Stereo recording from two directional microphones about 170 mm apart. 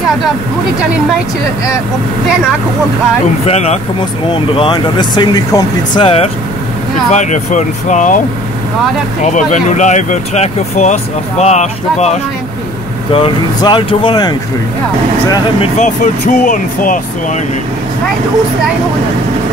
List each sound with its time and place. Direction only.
3.4 s speech: 40° left (ahead or behind)
4.6 s speech: 25° left (ahead or behind)
7.1 s speech: 45° left (ahead or behind)
9.2 s speech: 45° left (ahead or behind)
13.1 s speech: 30° left (ahead or behind)
15.8 s speech: 50° left (ahead or behind)